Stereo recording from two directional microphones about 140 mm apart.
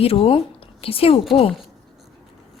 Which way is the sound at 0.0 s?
45° left (ahead or behind).